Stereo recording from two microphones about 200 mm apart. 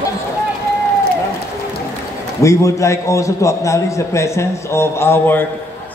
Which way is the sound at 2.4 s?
15° left (ahead or behind).